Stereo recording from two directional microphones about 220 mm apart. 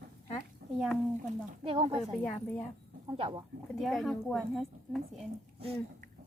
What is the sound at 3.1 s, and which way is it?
Speech, 20° right (ahead or behind).